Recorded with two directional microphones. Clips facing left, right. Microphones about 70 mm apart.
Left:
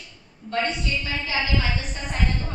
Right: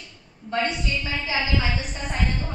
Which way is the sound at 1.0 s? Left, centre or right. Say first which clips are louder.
Right 1 dB; centre.